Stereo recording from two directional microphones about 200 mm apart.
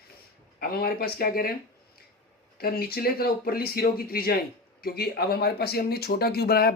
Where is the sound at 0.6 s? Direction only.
50° left (ahead or behind).